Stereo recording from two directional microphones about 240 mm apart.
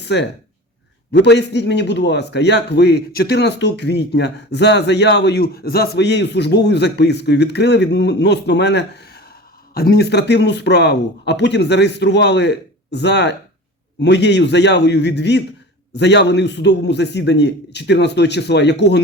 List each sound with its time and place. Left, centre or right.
0.0 s a man's voice: left